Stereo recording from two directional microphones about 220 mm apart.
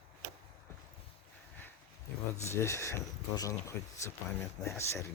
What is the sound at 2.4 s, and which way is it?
Speech, 15° left (ahead or behind).